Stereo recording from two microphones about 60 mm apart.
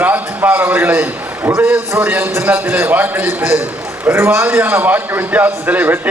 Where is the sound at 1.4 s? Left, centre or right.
Centre.